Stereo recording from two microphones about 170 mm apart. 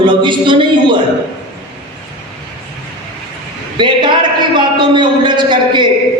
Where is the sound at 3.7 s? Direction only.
30° right (ahead or behind).